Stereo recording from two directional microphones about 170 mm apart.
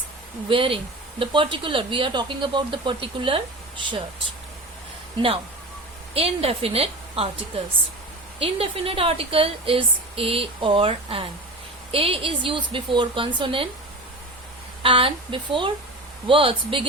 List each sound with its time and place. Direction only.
0.4 s a woman's voice: 30° right (ahead or behind)
6.1 s a woman's voice: 35° right (ahead or behind)
14.8 s a woman's voice: 30° right (ahead or behind)